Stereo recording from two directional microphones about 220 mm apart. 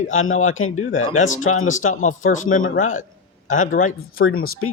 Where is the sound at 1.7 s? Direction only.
35° left (ahead or behind).